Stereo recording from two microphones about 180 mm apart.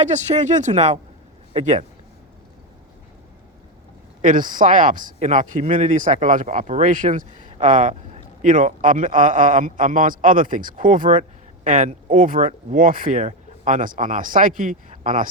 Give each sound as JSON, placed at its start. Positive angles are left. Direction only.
{"t": 0.0, "sound": "a man's voice", "side_deg": -40}
{"t": 4.2, "sound": "a man's voice", "side_deg": -50}